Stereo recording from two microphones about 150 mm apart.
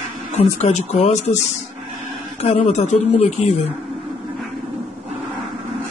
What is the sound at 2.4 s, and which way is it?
Speech, 45° left (ahead or behind).